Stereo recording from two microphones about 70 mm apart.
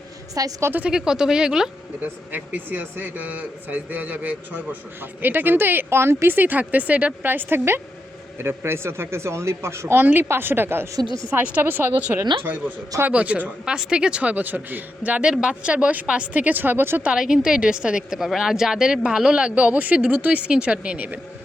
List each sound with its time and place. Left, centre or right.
0.4 s a woman's voice: right
0.9 s speech: centre
2.3 s a man's voice: right
10.0 s a man's voice: right
11.3 s a man's voice: right
17.0 s speech: centre